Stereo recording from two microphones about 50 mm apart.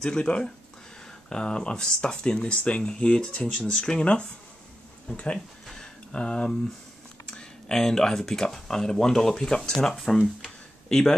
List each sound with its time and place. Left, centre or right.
0.0 s speech: left
5.7 s a sound: centre
7.2 s speech: centre